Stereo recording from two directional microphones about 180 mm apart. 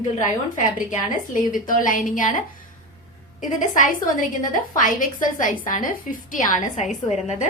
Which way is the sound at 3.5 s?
45° left (ahead or behind).